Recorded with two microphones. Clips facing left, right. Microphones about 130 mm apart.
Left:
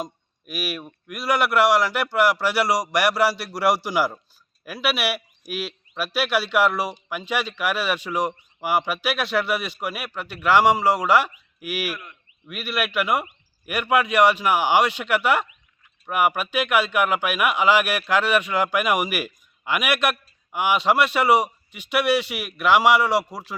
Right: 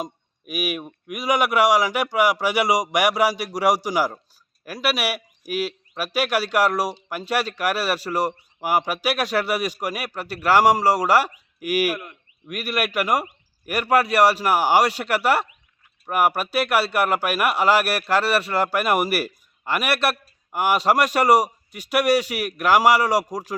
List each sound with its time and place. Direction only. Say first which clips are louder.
0.0 s speech: right 1 dB; 10° right (ahead or behind)
5.6 s a sound: right 1 dB; 10° right (ahead or behind)
6.1 s speech: right 1 dB; 10° right (ahead or behind)
6.4 s a man's voice: right 1 dB; 40° right (ahead or behind)